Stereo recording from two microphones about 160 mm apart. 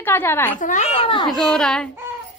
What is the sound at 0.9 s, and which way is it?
Speech, 35° left (ahead or behind).